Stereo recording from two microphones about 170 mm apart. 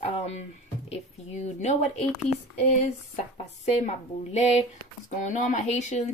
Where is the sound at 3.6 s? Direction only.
40° left (ahead or behind).